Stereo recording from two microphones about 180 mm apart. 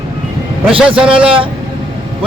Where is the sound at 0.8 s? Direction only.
5° right (ahead or behind).